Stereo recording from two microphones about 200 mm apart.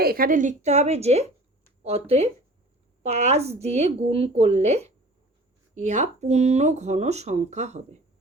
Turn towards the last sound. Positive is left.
turn(degrees=-35)  # may be behind; listen again after turning